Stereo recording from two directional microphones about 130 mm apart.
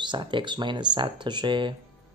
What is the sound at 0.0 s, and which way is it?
Speech, 35° right (ahead or behind).